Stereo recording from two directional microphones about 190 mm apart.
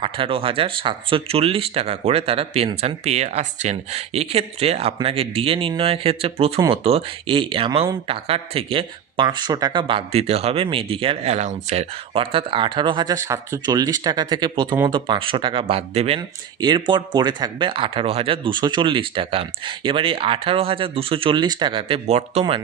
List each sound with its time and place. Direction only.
0.0 s speech: 30° right (ahead or behind)